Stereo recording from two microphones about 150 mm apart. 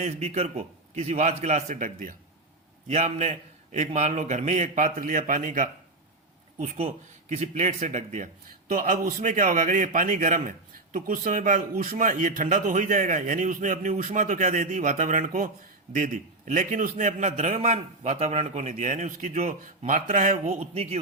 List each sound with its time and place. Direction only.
0.0 s a man's voice: 50° right (ahead or behind)
2.8 s a man's voice: 50° right (ahead or behind)
6.7 s a man's voice: 45° right (ahead or behind)
8.6 s a man's voice: 60° right (ahead or behind)